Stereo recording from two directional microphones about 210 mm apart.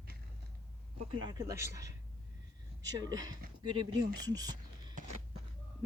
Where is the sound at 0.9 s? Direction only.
20° right (ahead or behind).